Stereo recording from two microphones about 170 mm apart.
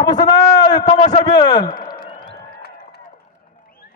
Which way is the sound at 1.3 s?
25° left (ahead or behind).